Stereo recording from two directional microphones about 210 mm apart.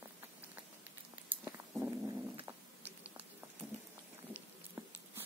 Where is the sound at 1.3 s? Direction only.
5° right (ahead or behind).